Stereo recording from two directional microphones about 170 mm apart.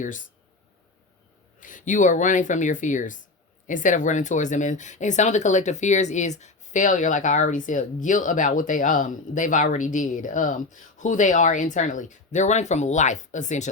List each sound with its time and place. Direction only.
0.0 s speech: 50° left (ahead or behind)
1.5 s speech: 50° left (ahead or behind)